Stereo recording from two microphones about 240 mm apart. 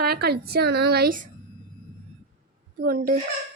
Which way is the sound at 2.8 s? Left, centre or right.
Right.